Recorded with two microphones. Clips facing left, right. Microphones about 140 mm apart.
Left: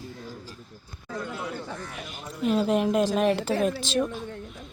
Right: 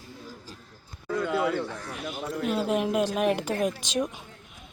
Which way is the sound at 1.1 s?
90° right.